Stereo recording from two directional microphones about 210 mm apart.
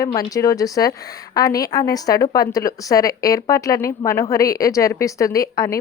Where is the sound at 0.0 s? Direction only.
20° left (ahead or behind).